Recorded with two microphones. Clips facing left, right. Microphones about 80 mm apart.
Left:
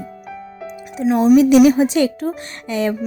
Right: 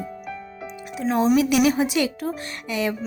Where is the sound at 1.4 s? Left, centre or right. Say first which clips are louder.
Left 8 dB; left.